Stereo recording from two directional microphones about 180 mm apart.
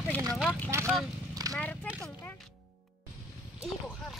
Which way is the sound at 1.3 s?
20° right (ahead or behind).